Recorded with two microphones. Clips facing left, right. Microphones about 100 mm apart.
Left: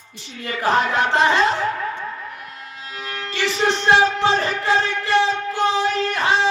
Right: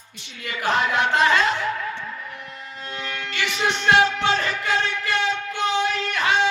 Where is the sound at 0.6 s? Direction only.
35° left (ahead or behind).